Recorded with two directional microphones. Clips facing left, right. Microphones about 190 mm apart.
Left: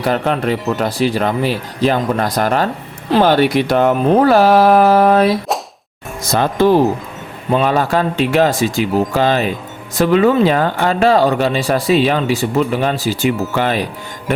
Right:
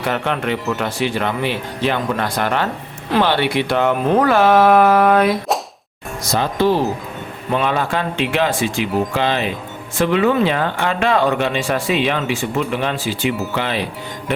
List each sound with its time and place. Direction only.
0.0 s speech: 35° left (ahead or behind)
6.3 s speech: 50° left (ahead or behind)
7.5 s speech: 40° left (ahead or behind)